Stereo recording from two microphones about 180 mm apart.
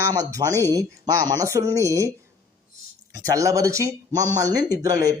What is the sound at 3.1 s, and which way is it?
A man's voice, 20° right (ahead or behind).